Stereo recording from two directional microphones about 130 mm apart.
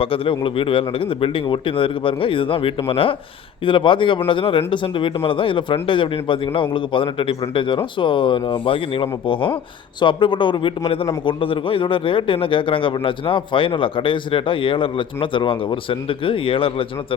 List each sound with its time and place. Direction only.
0.0 s a man's voice: 45° left (ahead or behind)